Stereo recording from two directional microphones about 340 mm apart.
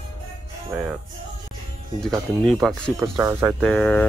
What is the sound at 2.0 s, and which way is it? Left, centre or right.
Speech, centre.